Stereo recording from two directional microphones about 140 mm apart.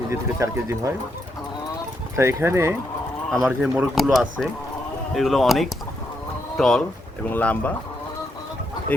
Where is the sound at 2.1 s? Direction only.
20° right (ahead or behind).